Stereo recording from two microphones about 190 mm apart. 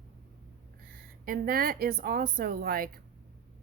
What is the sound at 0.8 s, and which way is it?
A woman's voice, 50° right (ahead or behind).